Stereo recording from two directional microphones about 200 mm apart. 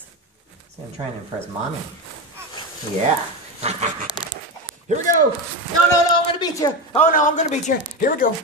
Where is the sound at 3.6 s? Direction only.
35° right (ahead or behind).